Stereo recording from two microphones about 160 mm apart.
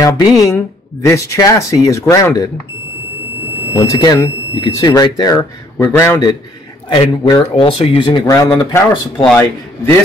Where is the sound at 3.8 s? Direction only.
25° left (ahead or behind).